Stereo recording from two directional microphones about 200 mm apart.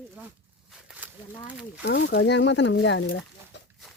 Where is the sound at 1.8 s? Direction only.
55° left (ahead or behind).